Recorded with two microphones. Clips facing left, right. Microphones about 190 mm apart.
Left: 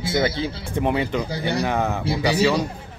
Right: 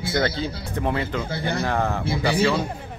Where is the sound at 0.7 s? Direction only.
15° left (ahead or behind).